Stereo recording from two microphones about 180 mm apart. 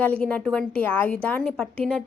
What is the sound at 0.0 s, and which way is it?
A woman's voice, 10° left (ahead or behind).